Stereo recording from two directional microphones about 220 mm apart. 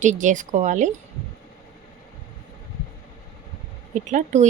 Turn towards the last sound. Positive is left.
turn(degrees=-35)  # may be behind; listen again after turning